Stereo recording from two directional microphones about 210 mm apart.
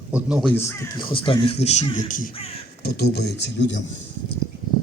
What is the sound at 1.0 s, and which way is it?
A man's voice, 25° left (ahead or behind).